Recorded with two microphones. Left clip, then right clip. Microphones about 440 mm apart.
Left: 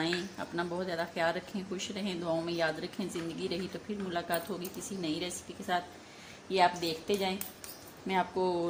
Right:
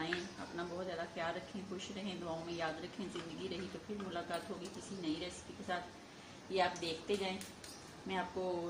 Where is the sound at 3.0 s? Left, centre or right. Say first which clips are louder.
Left 7 dB; right.